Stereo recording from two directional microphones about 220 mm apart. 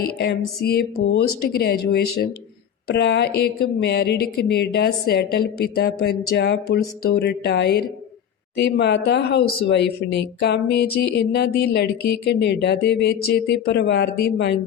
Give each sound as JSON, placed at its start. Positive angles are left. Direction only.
{"t": 0.2, "sound": "speech", "side_deg": 50}